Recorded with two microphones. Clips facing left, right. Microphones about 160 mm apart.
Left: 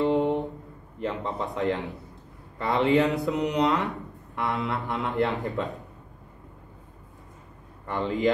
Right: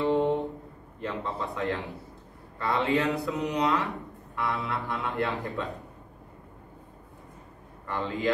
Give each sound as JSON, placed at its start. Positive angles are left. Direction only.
{"t": 0.0, "sound": "a sound", "side_deg": 20}
{"t": 1.0, "sound": "speech", "side_deg": 20}
{"t": 7.8, "sound": "speech", "side_deg": 20}